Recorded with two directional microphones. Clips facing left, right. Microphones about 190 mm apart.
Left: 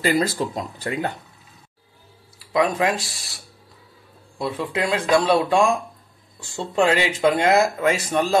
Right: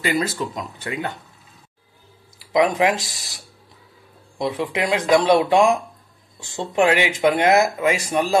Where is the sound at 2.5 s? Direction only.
20° right (ahead or behind).